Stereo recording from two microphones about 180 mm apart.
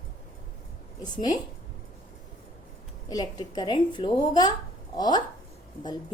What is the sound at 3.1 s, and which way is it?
A woman's voice, 25° left (ahead or behind).